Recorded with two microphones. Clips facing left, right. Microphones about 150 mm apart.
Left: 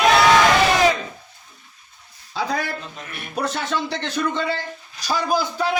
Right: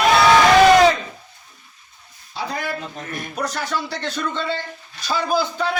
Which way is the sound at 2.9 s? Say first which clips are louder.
Right 5 dB; 40° right (ahead or behind).